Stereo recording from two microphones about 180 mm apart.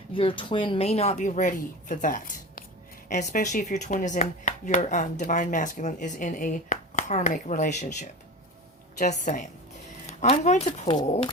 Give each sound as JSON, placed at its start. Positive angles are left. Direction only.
{"t": 0.1, "sound": "speech", "side_deg": 30}